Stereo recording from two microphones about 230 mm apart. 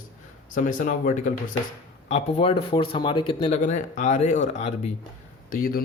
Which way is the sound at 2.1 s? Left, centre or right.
Left.